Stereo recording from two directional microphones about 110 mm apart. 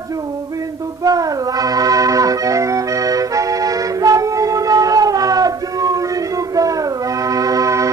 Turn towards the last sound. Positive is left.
turn(degrees=-30)  # may be behind; listen again after turning